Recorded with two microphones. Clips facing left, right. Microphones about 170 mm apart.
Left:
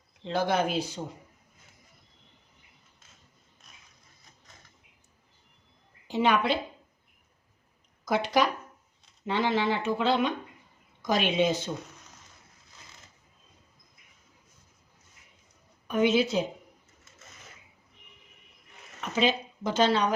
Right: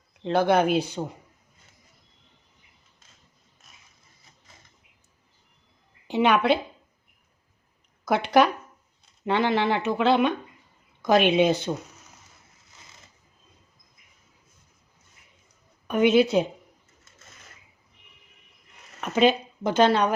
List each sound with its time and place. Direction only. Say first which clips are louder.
0.2 s speech: right 6 dB; 60° right (ahead or behind)
6.1 s speech: right 4 dB; 65° right (ahead or behind)
8.0 s speech: right 5 dB; 65° right (ahead or behind)
15.9 s speech: right 5 dB; 60° right (ahead or behind)
19.0 s speech: right 6 dB; 60° right (ahead or behind)